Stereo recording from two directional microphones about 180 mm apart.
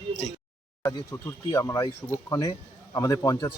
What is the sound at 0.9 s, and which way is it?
Speech, 20° left (ahead or behind).